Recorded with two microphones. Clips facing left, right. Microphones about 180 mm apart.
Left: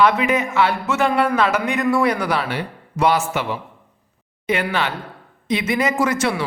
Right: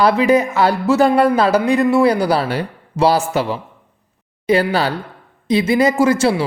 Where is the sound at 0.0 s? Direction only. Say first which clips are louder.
Right 4 dB; 35° right (ahead or behind).